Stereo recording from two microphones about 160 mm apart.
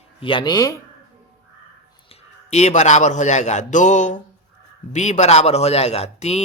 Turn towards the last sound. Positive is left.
turn(degrees=45)  # may be behind; listen again after turning